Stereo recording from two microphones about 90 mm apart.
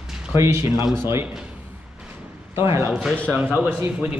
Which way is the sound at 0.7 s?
50° left (ahead or behind).